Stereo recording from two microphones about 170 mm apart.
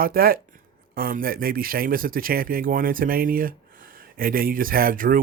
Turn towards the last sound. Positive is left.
turn(degrees=-55)  # may be behind; listen again after turning